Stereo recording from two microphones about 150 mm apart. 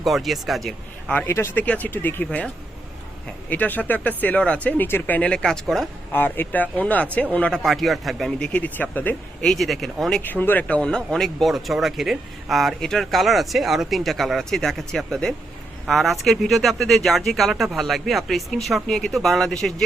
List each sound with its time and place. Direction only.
0.0 s speech: centre (ahead or behind)
3.5 s speech: 10° left (ahead or behind)
6.1 s speech: 15° left (ahead or behind)